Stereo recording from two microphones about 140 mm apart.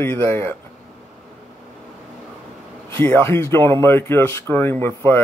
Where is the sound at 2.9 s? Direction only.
15° left (ahead or behind).